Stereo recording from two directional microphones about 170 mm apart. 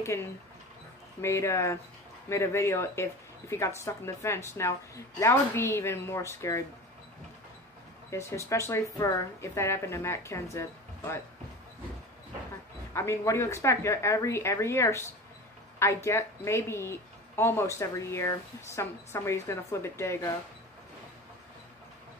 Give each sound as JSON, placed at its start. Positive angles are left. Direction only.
{"t": 0.0, "sound": "a woman's voice", "side_deg": 15}
{"t": 8.1, "sound": "a woman's voice", "side_deg": 15}
{"t": 12.9, "sound": "a woman's voice", "side_deg": 15}